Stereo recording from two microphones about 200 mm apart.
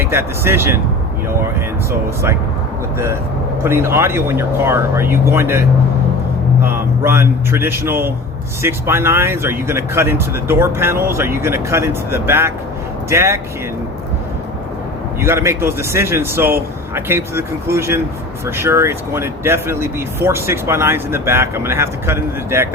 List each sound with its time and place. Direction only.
0.0 s speech: 10° right (ahead or behind)
1.9 s speech: 15° right (ahead or behind)
3.6 s speech: 15° right (ahead or behind)
15.2 s speech: 15° right (ahead or behind)